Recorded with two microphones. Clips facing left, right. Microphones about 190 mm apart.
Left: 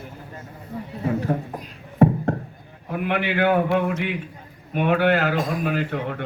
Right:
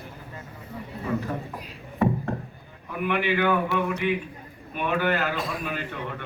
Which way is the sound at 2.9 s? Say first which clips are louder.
Left 1 dB; 70° left (ahead or behind).